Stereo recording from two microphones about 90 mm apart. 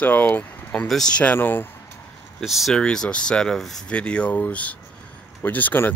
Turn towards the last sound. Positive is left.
turn(degrees=20)  # may be behind; listen again after turning